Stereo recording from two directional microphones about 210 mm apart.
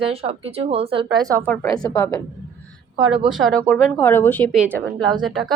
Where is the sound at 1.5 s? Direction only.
10° left (ahead or behind).